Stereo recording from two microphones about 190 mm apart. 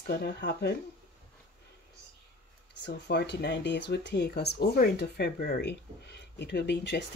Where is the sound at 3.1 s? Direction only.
65° left (ahead or behind).